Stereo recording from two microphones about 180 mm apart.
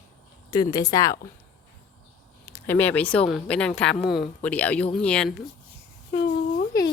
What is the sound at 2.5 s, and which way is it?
A woman's voice, 10° left (ahead or behind).